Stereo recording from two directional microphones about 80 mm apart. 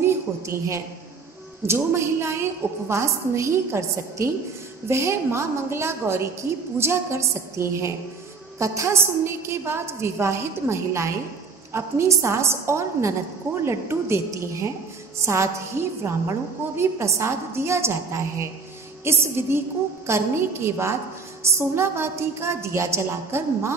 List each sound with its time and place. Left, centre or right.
0.0 s a woman's voice: right
19.0 s music: right
20.1 s a woman's voice: right